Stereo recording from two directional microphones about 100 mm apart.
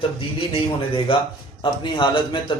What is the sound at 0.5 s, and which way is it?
Speech, 65° left (ahead or behind).